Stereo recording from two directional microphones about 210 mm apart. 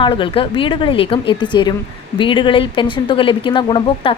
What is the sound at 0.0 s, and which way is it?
Speech, 25° left (ahead or behind).